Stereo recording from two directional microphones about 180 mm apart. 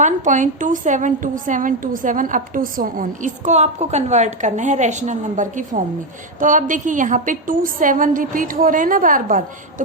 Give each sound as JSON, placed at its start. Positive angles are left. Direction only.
{"t": 0.0, "sound": "a woman's voice", "side_deg": -45}